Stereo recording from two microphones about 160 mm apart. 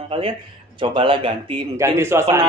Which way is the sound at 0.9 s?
30° right (ahead or behind).